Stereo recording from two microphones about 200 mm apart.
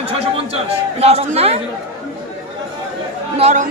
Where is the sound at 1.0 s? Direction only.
30° right (ahead or behind).